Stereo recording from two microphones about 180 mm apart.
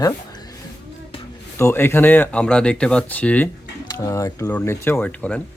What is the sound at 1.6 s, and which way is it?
Speech, 15° left (ahead or behind).